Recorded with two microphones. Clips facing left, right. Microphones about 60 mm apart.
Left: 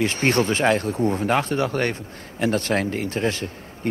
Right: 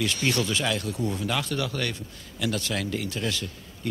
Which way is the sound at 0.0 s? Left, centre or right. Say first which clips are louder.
Left 6 dB; left.